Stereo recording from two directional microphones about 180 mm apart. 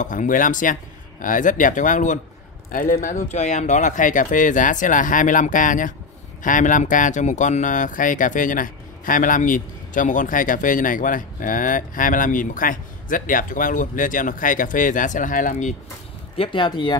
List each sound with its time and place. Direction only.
0.0 s speech: 45° left (ahead or behind)
16.3 s speech: 25° left (ahead or behind)